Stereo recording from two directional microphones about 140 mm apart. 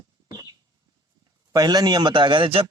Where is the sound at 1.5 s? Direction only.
25° right (ahead or behind).